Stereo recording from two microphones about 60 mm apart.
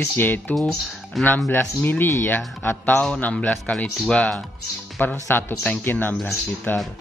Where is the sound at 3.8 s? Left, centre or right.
Centre.